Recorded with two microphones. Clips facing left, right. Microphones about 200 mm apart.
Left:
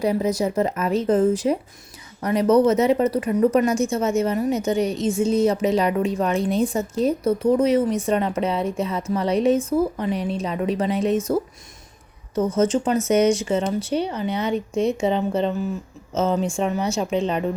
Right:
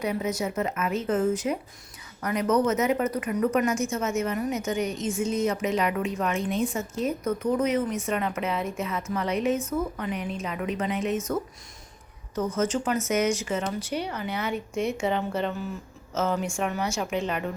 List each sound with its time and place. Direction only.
0.0 s a woman's voice: 35° left (ahead or behind)
12.5 s a woman's voice: 25° left (ahead or behind)